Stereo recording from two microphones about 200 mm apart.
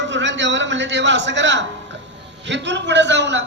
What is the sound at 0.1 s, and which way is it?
A man's voice, 65° right (ahead or behind).